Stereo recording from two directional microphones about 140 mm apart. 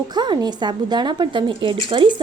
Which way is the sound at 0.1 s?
30° right (ahead or behind).